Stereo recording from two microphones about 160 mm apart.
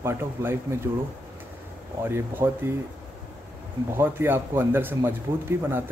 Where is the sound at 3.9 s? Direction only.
15° right (ahead or behind).